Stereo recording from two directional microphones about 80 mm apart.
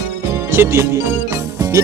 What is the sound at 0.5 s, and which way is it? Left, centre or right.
Music, right.